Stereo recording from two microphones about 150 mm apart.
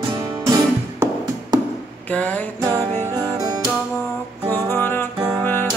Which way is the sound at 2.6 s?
20° right (ahead or behind).